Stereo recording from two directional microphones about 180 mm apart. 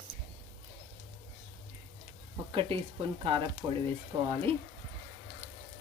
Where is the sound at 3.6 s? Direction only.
20° right (ahead or behind).